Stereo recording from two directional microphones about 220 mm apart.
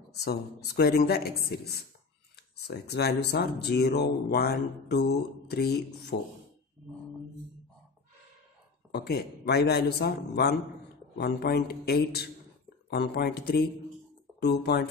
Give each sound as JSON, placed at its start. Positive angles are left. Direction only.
{"t": 0.2, "sound": "speech", "side_deg": 50}
{"t": 8.9, "sound": "speech", "side_deg": 45}